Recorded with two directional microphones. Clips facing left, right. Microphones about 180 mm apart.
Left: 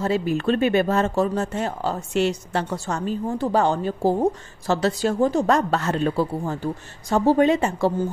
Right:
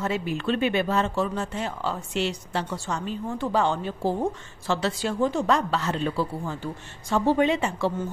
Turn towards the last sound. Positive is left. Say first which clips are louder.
# left 4 dB
turn(degrees=40)  # may be behind; listen again after turning